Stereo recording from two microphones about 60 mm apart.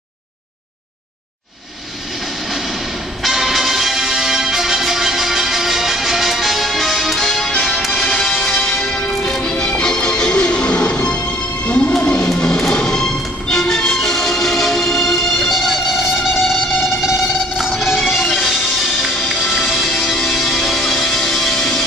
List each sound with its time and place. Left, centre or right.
3.2 s music: centre; by 11.9 s left
12.4 s music: centre